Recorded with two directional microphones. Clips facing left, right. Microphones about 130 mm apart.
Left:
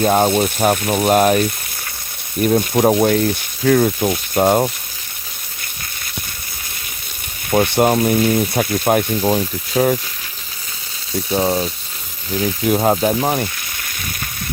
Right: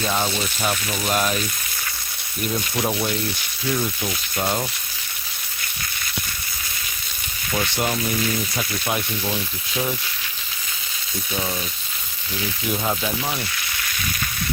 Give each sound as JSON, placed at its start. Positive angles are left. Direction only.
{"t": 0.0, "sound": "speech", "side_deg": 50}
{"t": 7.5, "sound": "speech", "side_deg": 50}
{"t": 11.3, "sound": "speech", "side_deg": 40}
{"t": 12.4, "sound": "speech", "side_deg": 50}